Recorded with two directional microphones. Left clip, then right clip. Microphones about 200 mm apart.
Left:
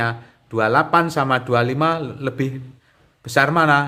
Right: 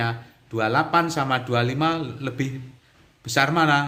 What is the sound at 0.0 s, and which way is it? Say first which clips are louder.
A man's voice: left 4 dB; 40° left (ahead or behind).